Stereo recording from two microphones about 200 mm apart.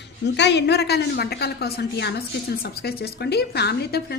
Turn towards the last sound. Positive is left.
turn(degrees=55)  # may be behind; listen again after turning